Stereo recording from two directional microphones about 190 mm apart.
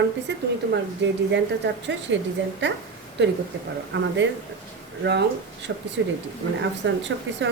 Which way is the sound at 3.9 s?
70° right (ahead or behind).